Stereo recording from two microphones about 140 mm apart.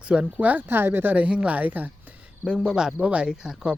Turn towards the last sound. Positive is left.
turn(degrees=-5)  # may be behind; listen again after turning